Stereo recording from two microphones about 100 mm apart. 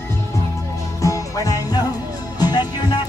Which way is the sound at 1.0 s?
35° left (ahead or behind).